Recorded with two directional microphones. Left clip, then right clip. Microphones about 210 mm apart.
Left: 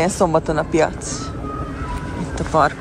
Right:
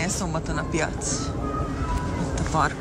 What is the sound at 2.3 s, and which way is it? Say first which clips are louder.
Vehicle: left 8 dB; 5° right (ahead or behind).